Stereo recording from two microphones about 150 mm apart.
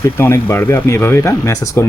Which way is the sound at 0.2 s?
15° left (ahead or behind).